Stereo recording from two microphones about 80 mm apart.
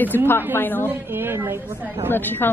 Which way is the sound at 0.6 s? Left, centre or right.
Left.